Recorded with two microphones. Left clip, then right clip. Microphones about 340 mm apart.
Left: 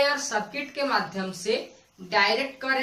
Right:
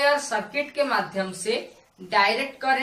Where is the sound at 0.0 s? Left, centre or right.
Centre.